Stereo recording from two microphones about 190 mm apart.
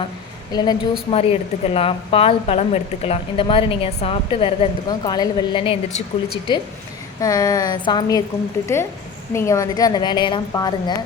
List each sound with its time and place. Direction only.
0.5 s a woman's voice: 20° left (ahead or behind)
1.1 s a woman's voice: 30° left (ahead or behind)